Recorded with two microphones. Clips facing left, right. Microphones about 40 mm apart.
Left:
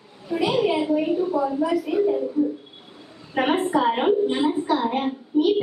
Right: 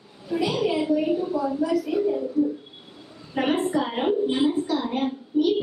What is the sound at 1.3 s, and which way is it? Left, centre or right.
Speech, centre.